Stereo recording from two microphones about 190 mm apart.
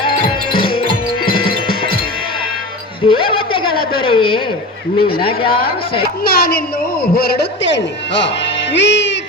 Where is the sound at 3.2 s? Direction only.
25° left (ahead or behind).